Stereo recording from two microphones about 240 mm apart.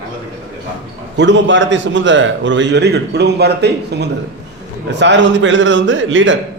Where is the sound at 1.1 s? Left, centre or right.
Right.